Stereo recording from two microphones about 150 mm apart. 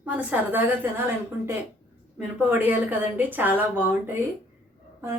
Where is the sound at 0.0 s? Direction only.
10° right (ahead or behind).